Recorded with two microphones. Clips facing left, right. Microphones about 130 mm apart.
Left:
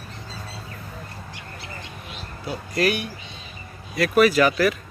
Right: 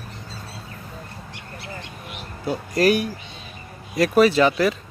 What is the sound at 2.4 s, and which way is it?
Speech, 40° right (ahead or behind).